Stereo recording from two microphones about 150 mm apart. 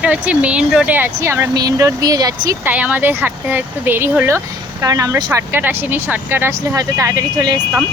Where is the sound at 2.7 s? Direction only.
10° right (ahead or behind).